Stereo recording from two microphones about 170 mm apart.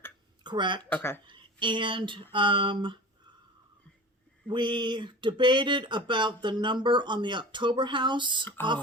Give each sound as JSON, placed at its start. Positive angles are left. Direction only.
{"t": 0.4, "sound": "speech", "side_deg": -25}
{"t": 0.9, "sound": "speech", "side_deg": 10}
{"t": 1.3, "sound": "speech", "side_deg": -30}
{"t": 4.4, "sound": "speech", "side_deg": -25}